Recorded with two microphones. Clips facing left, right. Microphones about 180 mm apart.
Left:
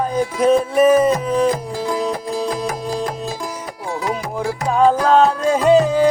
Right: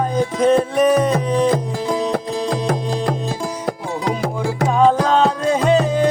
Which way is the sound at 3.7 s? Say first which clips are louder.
Right 2 dB; 70° right (ahead or behind).